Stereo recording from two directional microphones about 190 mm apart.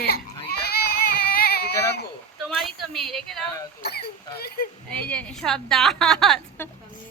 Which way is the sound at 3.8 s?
55° left (ahead or behind).